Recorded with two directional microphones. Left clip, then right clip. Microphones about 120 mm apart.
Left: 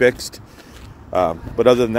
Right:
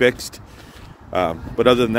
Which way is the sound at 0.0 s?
15° right (ahead or behind).